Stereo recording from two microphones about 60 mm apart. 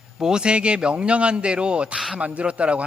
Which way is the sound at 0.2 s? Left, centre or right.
Centre.